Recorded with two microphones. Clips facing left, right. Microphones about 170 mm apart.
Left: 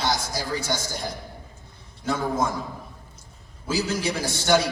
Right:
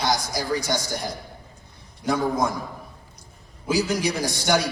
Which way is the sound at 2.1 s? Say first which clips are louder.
Right 3 dB; 15° right (ahead or behind).